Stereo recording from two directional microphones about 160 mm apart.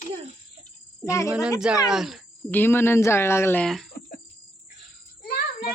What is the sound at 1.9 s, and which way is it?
Speech, centre (ahead or behind).